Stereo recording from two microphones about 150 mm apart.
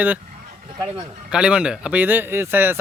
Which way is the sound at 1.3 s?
5° right (ahead or behind).